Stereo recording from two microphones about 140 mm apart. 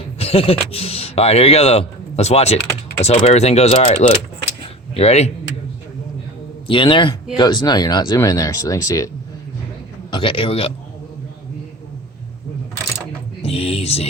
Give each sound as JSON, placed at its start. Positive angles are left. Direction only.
{"t": 0.2, "sound": "speech", "side_deg": 45}
{"t": 4.6, "sound": "a sound", "side_deg": 50}
{"t": 6.7, "sound": "a man's voice", "side_deg": 35}
{"t": 10.1, "sound": "a man's voice", "side_deg": 40}
{"t": 13.4, "sound": "speech", "side_deg": 45}